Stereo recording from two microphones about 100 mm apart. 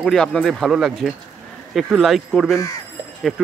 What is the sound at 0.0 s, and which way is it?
Speech, 5° left (ahead or behind).